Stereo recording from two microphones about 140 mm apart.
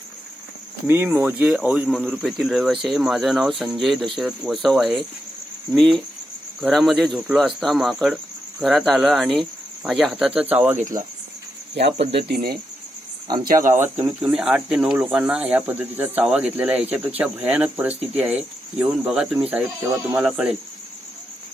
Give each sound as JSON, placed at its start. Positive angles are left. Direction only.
{"t": 0.9, "sound": "speech", "side_deg": -15}
{"t": 2.8, "sound": "cricket", "side_deg": 0}
{"t": 10.8, "sound": "speech", "side_deg": -70}
{"t": 13.2, "sound": "speech", "side_deg": -30}
{"t": 14.0, "sound": "speech", "side_deg": -5}
{"t": 19.8, "sound": "speech", "side_deg": -25}
{"t": 20.1, "sound": "speech", "side_deg": -5}